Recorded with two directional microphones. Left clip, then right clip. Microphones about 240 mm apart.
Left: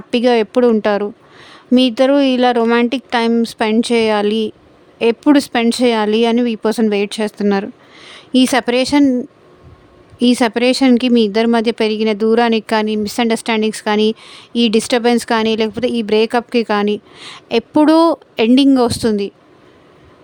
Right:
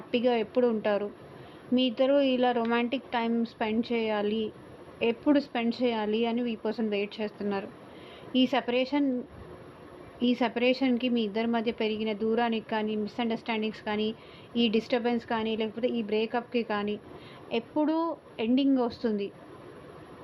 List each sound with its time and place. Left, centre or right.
0.1 s speech: left
10.2 s speech: left